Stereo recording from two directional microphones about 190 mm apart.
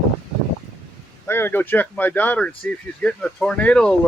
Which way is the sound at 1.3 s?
10° left (ahead or behind).